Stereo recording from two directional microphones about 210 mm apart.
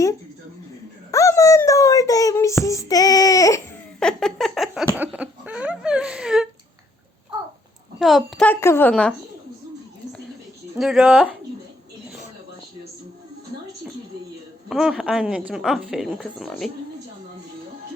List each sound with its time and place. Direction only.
1.1 s child singing: 15° left (ahead or behind)
4.0 s a sound: centre (ahead or behind)
7.9 s a woman's voice: centre (ahead or behind)
10.8 s a woman's voice: centre (ahead or behind)
14.7 s a woman's voice: centre (ahead or behind)